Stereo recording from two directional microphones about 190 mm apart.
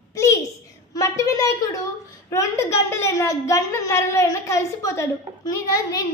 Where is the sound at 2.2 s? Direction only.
15° left (ahead or behind).